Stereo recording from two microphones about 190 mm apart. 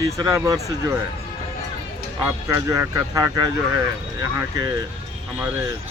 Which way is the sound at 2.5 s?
15° right (ahead or behind).